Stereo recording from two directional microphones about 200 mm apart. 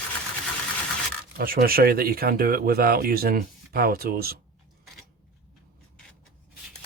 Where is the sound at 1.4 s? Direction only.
45° right (ahead or behind).